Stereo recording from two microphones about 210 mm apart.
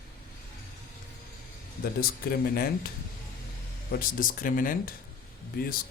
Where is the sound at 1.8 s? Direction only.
45° left (ahead or behind).